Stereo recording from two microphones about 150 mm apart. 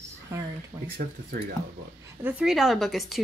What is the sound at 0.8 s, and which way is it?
Speech, 90° right.